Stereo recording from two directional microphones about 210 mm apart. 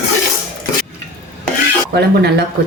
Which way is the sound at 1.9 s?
50° right (ahead or behind).